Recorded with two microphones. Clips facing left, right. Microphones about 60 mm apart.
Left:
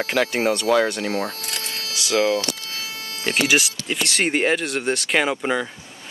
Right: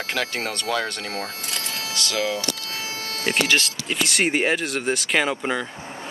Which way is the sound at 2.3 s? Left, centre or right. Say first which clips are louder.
Left 3 dB; centre.